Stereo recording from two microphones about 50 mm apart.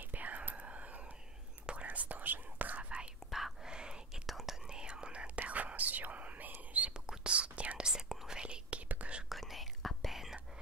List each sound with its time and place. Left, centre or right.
0.0 s whispering: right
3.3 s whispering: centre
3.6 s whispering: centre
4.1 s whispering: centre
4.6 s whispering: centre
5.2 s whispering: right
6.9 s whispering: centre
9.3 s whispering: centre